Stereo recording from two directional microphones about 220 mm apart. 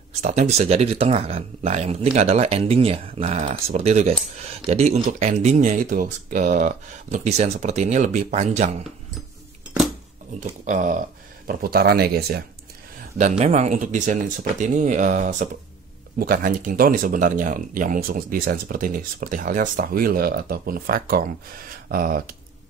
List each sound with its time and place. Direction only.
0.2 s speech: 30° right (ahead or behind)
10.7 s speech: 35° right (ahead or behind)
13.2 s speech: 30° right (ahead or behind)